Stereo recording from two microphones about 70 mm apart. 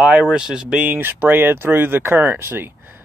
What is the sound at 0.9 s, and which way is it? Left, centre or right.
Speech, right.